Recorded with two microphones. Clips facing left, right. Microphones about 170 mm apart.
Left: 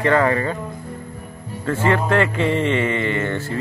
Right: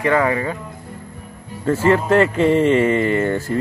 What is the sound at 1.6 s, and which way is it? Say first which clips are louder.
A man's voice: right 3 dB; 35° right (ahead or behind).